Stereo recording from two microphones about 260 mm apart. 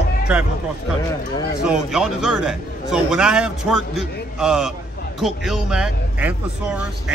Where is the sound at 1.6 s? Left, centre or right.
Centre.